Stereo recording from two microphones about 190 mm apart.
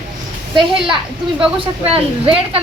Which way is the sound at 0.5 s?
25° right (ahead or behind).